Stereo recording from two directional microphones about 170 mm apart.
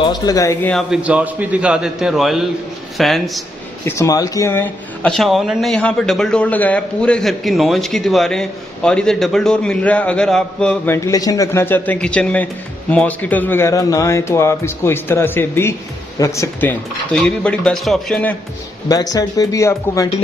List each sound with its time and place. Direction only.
0.0 s speech: 25° left (ahead or behind)
0.7 s a man's voice: centre (ahead or behind)
3.8 s a man's voice: 15° left (ahead or behind)
5.0 s a man's voice: centre (ahead or behind)
11.1 s a man's voice: 20° left (ahead or behind); by 18.3 s 5° left (ahead or behind)
18.9 s speech: 20° left (ahead or behind)